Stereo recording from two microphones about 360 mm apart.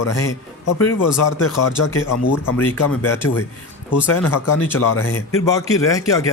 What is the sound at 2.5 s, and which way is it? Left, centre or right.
Speech, centre.